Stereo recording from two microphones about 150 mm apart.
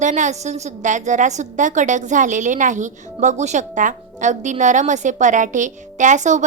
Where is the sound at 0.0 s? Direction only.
55° right (ahead or behind).